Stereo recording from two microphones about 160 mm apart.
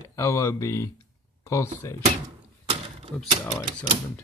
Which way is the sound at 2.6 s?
35° right (ahead or behind).